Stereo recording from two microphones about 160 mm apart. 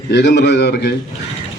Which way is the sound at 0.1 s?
90° left.